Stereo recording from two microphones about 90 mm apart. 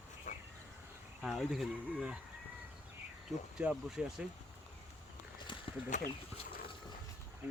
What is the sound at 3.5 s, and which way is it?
Speech, 5° right (ahead or behind).